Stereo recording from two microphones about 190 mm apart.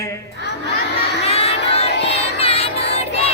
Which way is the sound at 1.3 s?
30° left (ahead or behind).